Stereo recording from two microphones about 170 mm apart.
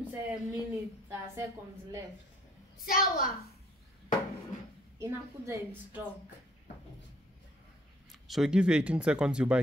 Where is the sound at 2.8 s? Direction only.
60° left (ahead or behind).